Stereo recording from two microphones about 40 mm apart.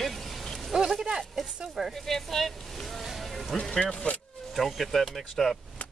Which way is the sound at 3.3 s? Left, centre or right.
Centre.